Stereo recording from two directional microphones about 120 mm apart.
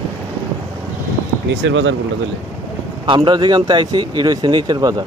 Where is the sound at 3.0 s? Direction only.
40° right (ahead or behind).